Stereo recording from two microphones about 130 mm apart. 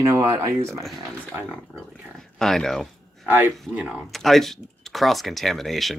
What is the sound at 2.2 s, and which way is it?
Speech, 5° left (ahead or behind).